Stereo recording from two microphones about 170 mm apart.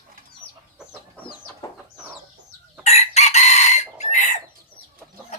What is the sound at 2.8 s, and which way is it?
Chicken, 40° left (ahead or behind).